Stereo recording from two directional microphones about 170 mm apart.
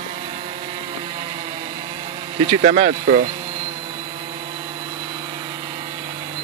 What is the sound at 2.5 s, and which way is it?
Speech, 40° right (ahead or behind).